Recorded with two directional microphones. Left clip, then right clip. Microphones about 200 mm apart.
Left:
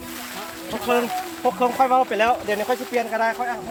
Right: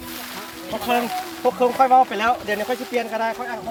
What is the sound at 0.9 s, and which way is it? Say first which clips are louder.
Speech: left 1 dB; 20° right (ahead or behind).